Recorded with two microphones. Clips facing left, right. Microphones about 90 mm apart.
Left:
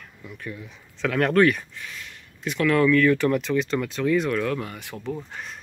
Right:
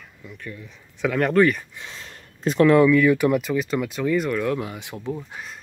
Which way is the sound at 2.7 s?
15° right (ahead or behind).